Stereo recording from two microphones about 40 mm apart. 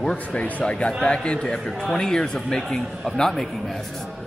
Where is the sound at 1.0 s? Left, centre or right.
Left.